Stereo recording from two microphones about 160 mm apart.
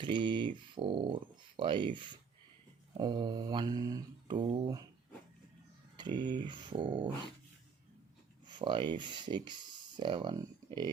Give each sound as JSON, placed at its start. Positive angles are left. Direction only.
{"t": 0.0, "sound": "speech", "side_deg": -30}
{"t": 3.0, "sound": "mantra", "side_deg": -25}
{"t": 6.0, "sound": "mantra", "side_deg": -30}
{"t": 8.4, "sound": "speech", "side_deg": -30}